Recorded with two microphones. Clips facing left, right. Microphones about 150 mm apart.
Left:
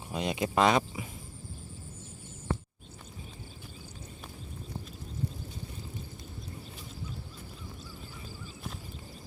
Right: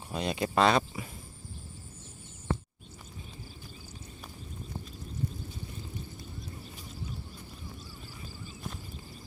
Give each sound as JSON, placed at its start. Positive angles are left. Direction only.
{"t": 0.1, "sound": "speech", "side_deg": 15}